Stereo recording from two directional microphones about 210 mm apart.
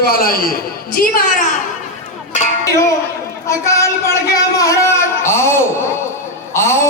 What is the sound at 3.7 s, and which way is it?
A man's voice, 15° left (ahead or behind).